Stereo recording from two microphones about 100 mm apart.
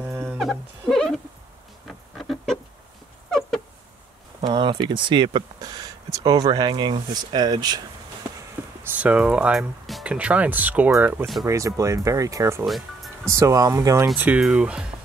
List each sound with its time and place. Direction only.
0.0 s music: 15° right (ahead or behind)
0.4 s music: centre (ahead or behind)
1.9 s a sound: centre (ahead or behind)
4.4 s speech: 55° right (ahead or behind)
8.9 s speech: 15° right (ahead or behind)
10.0 s speech: 15° right (ahead or behind)
11.4 s speech: 30° right (ahead or behind)
12.6 s music: centre (ahead or behind)
13.3 s speech: 30° right (ahead or behind)
14.1 s speech: 15° right (ahead or behind)